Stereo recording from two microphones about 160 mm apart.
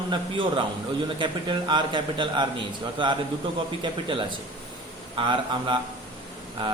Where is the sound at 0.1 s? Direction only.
30° right (ahead or behind).